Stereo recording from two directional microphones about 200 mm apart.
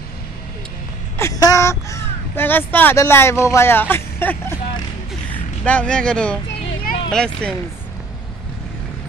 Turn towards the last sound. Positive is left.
turn(degrees=5)  # may be behind; listen again after turning